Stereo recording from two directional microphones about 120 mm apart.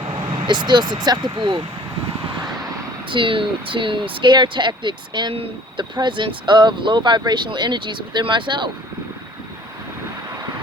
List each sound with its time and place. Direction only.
0.4 s speech: 40° right (ahead or behind)
3.1 s speech: 45° right (ahead or behind)